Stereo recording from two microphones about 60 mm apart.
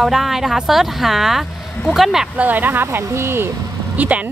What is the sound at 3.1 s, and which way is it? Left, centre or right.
Speech, right.